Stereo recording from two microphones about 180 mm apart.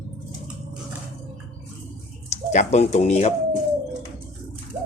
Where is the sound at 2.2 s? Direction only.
40° left (ahead or behind).